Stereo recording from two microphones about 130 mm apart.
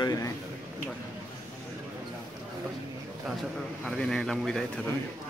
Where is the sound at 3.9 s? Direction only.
5° left (ahead or behind).